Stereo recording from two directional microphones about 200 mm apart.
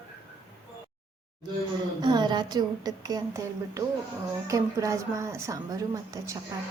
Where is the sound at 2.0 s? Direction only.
20° right (ahead or behind).